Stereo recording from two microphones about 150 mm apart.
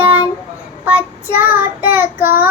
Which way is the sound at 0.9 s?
10° right (ahead or behind).